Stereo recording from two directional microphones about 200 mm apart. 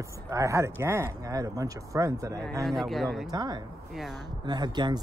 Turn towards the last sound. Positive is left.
turn(degrees=-20)  # may be behind; listen again after turning